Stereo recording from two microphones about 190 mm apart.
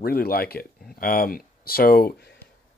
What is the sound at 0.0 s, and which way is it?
Speech, 55° left (ahead or behind).